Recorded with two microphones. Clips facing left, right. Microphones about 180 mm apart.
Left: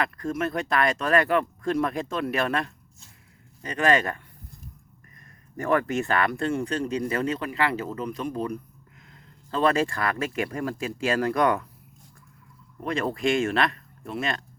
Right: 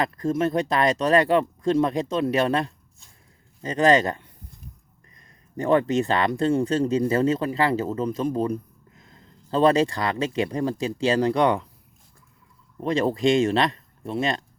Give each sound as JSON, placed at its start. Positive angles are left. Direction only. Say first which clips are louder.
{"t": 0.0, "sound": "speech", "louder": "right 4 dB", "side_deg": -30}
{"t": 5.5, "sound": "speech", "louder": "right 4 dB", "side_deg": -25}
{"t": 9.1, "sound": "a sound", "louder": "right 5 dB", "side_deg": -30}
{"t": 9.7, "sound": "speech", "louder": "right 3 dB", "side_deg": -25}
{"t": 12.8, "sound": "speech", "louder": "right 5 dB", "side_deg": -30}